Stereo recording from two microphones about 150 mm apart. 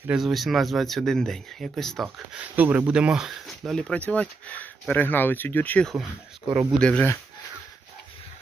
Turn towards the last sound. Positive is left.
turn(degrees=5)  # may be behind; listen again after turning